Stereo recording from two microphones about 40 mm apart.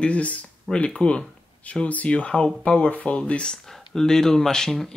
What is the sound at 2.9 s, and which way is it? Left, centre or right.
Speech, left.